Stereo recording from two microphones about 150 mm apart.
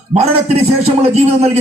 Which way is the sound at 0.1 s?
45° right (ahead or behind).